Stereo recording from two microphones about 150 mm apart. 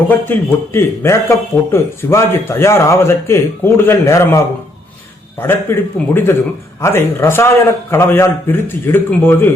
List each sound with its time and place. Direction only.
0.1 s a man's voice: 15° left (ahead or behind)